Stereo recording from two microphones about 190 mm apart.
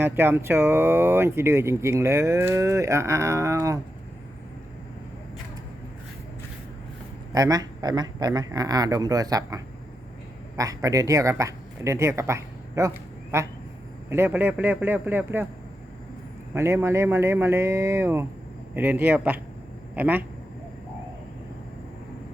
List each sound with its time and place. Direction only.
0.0 s speech: 10° right (ahead or behind)
7.3 s a man's voice: 20° right (ahead or behind)
10.6 s speech: 15° right (ahead or behind)
16.6 s speech: 15° right (ahead or behind)